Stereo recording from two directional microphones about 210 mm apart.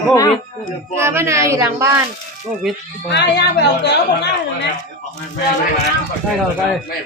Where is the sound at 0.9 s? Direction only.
10° right (ahead or behind).